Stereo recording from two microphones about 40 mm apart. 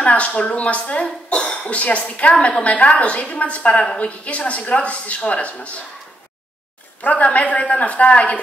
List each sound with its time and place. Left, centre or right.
0.0 s a woman's voice: left
1.0 s cough: centre
1.7 s a woman's voice: left
7.0 s a woman's voice: left